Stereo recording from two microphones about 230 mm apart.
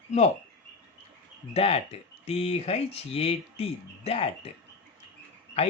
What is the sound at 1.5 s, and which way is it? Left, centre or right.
Speech, left.